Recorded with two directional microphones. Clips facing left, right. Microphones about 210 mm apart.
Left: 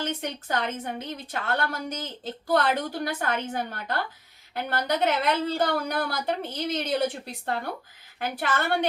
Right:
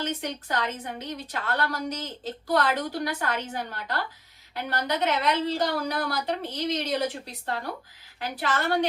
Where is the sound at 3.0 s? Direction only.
50° left (ahead or behind).